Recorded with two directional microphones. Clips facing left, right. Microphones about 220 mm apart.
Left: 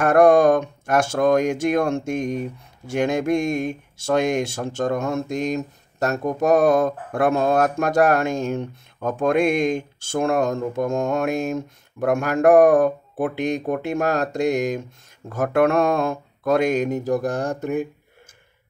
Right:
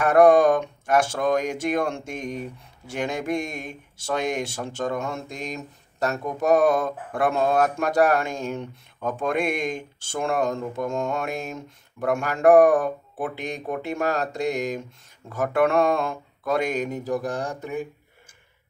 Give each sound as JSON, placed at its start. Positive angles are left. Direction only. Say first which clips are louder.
{"t": 0.0, "sound": "speech", "louder": "left 2 dB", "side_deg": 45}